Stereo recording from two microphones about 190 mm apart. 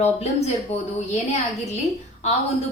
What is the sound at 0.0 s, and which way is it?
A woman's voice, 35° left (ahead or behind).